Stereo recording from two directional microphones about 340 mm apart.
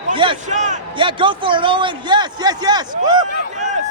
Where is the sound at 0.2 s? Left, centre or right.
Centre.